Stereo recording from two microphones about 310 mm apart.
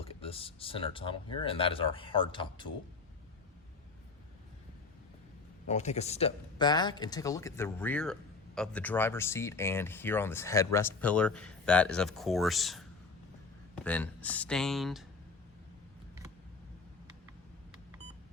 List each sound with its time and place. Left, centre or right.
0.0 s speech: centre
5.6 s speech: left; by 15.0 s centre